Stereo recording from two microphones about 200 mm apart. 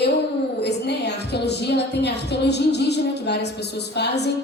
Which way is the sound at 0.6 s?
55° left (ahead or behind).